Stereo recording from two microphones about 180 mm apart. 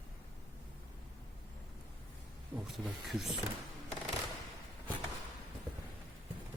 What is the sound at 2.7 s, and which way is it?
Speech, centre (ahead or behind).